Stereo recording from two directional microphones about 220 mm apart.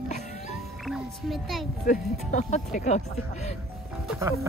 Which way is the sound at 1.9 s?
35° left (ahead or behind).